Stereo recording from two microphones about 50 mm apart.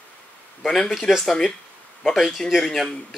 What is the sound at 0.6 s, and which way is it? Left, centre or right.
Speech, centre.